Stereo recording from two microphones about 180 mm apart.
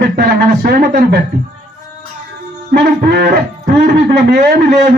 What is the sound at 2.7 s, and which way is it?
A man's voice, 65° right (ahead or behind).